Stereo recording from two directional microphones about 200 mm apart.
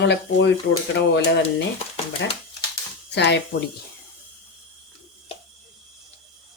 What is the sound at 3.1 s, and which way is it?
Speech, 60° left (ahead or behind).